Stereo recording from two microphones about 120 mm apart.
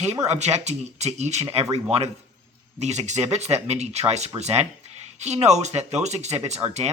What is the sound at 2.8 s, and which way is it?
Speech, 70° right (ahead or behind).